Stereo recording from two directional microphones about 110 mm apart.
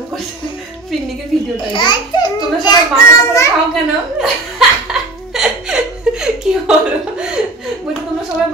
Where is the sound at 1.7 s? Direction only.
45° left (ahead or behind).